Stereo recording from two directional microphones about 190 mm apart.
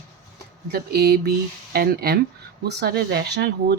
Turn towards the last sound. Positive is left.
turn(degrees=-60)  # may be behind; listen again after turning